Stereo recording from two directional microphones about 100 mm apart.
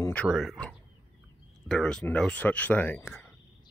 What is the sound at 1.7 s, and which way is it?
Speech, 5° left (ahead or behind).